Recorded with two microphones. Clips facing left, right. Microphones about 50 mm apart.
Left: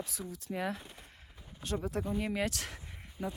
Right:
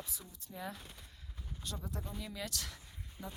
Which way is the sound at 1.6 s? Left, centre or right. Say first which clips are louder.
Left 11 dB; left.